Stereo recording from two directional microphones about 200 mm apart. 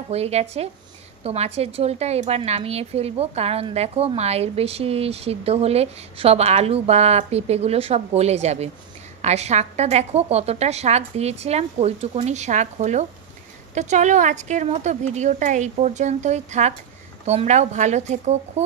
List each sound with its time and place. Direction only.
0.1 s a woman's voice: 30° right (ahead or behind)